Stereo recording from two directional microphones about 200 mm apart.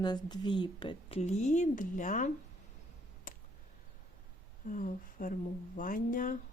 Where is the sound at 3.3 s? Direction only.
45° left (ahead or behind).